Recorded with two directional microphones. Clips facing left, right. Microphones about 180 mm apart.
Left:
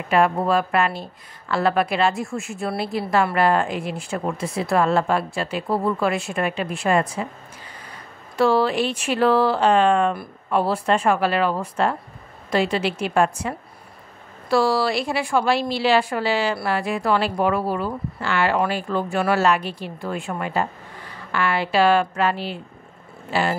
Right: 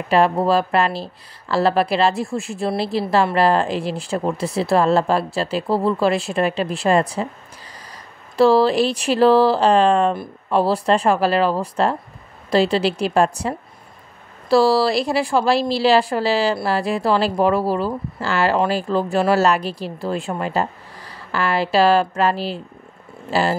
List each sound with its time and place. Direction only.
0.1 s speech: 35° right (ahead or behind)
8.4 s speech: 35° right (ahead or behind)